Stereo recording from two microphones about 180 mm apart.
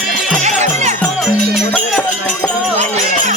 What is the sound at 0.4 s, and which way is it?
Music, 40° right (ahead or behind).